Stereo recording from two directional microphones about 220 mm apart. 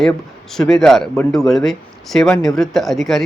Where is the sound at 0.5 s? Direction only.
Centre (ahead or behind).